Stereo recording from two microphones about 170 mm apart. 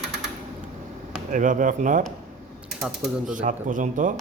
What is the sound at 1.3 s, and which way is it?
Speech, 50° right (ahead or behind).